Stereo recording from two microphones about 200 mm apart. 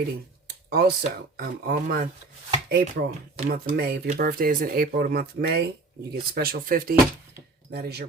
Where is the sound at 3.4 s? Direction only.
35° right (ahead or behind).